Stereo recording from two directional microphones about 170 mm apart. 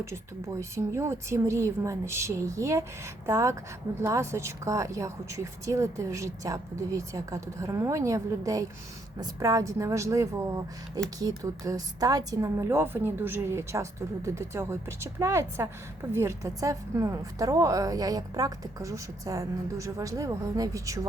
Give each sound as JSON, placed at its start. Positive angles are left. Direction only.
{"t": 0.6, "sound": "a woman's voice", "side_deg": -15}